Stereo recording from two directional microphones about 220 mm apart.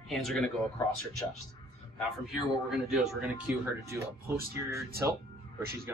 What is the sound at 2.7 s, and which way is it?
A man's voice, centre (ahead or behind).